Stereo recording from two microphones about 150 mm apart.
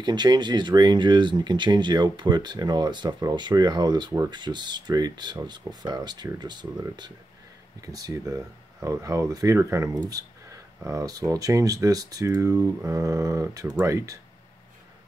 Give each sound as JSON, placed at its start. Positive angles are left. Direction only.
{"t": 0.0, "sound": "speech", "side_deg": -30}